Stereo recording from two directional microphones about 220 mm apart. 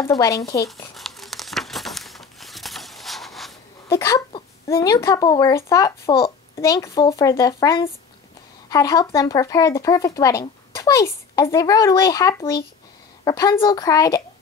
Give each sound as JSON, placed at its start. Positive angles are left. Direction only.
{"t": 0.0, "sound": "speech", "side_deg": 15}
{"t": 0.9, "sound": "crumpling", "side_deg": 0}
{"t": 3.9, "sound": "a sound", "side_deg": 15}
{"t": 4.7, "sound": "speech", "side_deg": 15}